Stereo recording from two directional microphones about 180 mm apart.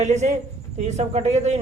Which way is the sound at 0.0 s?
40° right (ahead or behind).